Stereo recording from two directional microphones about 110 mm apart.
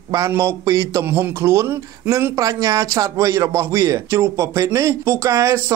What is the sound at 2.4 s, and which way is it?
A man's voice, 30° right (ahead or behind).